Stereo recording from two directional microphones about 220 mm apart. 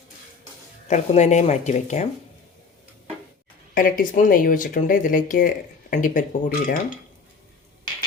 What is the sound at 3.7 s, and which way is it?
Speech, 40° left (ahead or behind).